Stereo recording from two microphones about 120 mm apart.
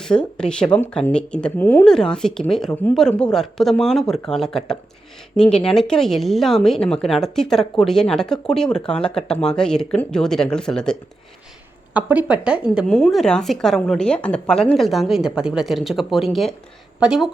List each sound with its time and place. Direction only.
0.0 s speech: 5° left (ahead or behind)
11.9 s speech: 15° right (ahead or behind)
12.9 s speech: 5° left (ahead or behind)